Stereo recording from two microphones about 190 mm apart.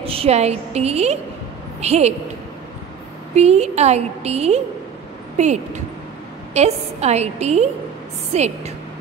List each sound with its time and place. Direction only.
0.0 s a woman's voice: 30° right (ahead or behind)
3.3 s a woman's voice: 35° right (ahead or behind)
6.5 s a woman's voice: 35° right (ahead or behind)